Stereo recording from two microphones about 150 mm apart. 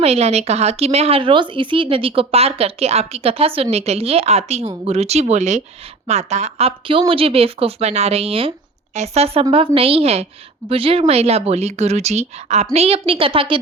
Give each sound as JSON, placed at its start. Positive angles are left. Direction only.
{"t": 0.0, "sound": "speech", "side_deg": -45}